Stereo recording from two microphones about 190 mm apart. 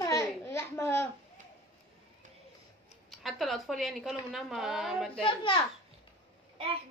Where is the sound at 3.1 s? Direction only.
Centre (ahead or behind).